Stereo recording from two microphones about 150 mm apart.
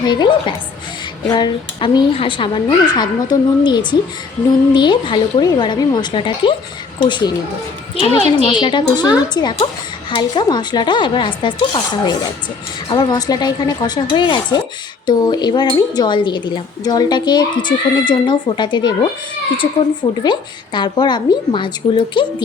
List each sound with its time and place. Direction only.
0.0 s speech: 30° left (ahead or behind)
7.9 s speech: 40° left (ahead or behind)
20.2 s speech: 30° left (ahead or behind)